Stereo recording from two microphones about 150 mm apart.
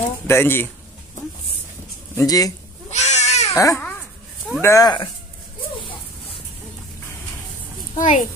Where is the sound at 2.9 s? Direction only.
50° left (ahead or behind).